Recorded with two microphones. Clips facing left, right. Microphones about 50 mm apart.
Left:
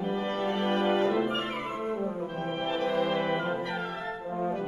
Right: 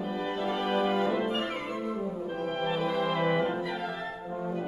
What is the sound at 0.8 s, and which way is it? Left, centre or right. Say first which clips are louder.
Brass instrument: left 3 dB; centre.